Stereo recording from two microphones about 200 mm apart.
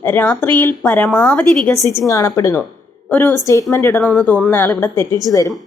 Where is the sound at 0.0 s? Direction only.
10° left (ahead or behind).